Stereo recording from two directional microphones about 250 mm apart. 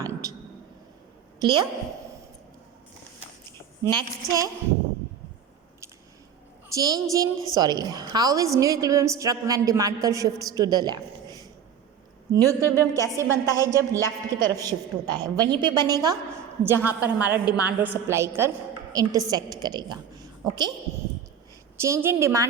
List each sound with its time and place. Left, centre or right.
0.0 s a sound: centre
1.4 s a woman's voice: centre
3.8 s a woman's voice: centre
6.7 s a woman's voice: centre
12.6 s a woman's voice: centre
13.1 s a woman's voice: centre
21.8 s a woman's voice: centre